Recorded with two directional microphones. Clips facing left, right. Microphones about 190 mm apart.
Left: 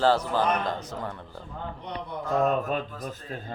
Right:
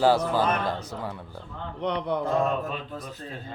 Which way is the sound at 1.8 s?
85° right.